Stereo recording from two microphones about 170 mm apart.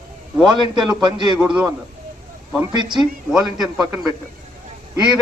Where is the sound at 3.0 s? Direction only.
5° right (ahead or behind).